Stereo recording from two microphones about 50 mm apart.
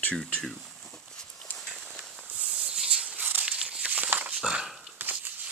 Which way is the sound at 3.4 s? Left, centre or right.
Centre.